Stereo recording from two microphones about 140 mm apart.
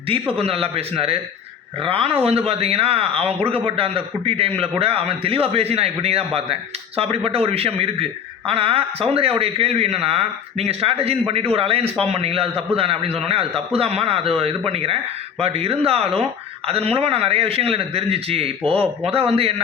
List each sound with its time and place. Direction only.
0.1 s a man's voice: 45° right (ahead or behind)